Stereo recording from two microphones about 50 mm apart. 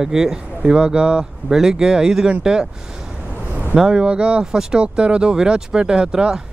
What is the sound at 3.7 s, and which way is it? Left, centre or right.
Speech, centre.